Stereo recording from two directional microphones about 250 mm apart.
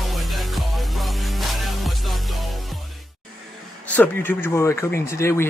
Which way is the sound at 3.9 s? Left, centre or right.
Centre.